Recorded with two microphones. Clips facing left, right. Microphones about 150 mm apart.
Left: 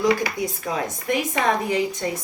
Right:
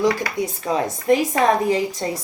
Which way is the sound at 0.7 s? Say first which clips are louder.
Right 8 dB; 35° right (ahead or behind).